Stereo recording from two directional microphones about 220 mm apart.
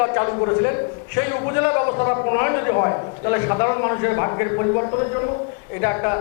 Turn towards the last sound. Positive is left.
turn(degrees=20)  # may be behind; listen again after turning